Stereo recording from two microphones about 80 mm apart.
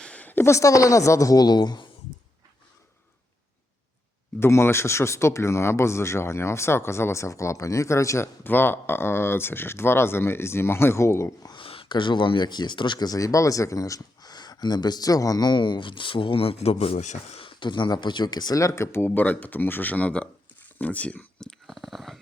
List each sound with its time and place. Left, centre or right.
0.0 s a sound: centre
0.4 s a woman's voice: left
4.4 s speech: left
8.4 s speech: left
11.5 s speech: left
17.4 s speech: left
18.6 s speech: left; by 21.5 s centre
21.7 s a sound: centre